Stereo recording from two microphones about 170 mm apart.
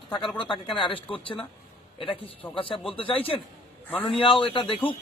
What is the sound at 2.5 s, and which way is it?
A man's voice, 30° left (ahead or behind).